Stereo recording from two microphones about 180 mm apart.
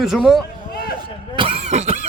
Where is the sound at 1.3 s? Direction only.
30° right (ahead or behind).